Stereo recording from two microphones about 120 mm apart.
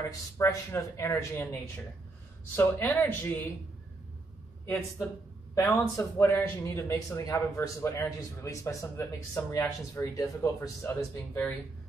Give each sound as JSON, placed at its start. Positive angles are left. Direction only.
{"t": 0.4, "sound": "a man's voice", "side_deg": 25}
{"t": 5.5, "sound": "a man's voice", "side_deg": 25}